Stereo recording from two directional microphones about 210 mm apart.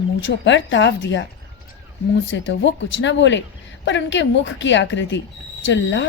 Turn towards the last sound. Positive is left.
turn(degrees=60)  # may be behind; listen again after turning